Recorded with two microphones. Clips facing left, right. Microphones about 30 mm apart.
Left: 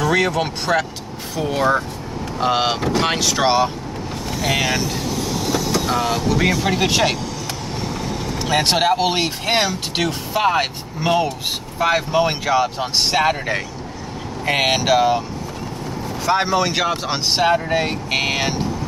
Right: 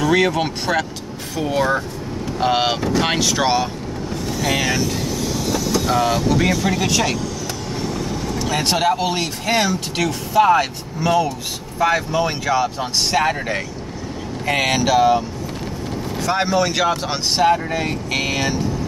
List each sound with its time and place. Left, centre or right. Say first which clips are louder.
0.0 s speech: right 1 dB; centre
3.4 s speech: left 2 dB; centre
5.9 s speech: right 5 dB; centre; by 7.2 s left
8.4 s speech: left 2 dB; left
14.4 s speech: even; centre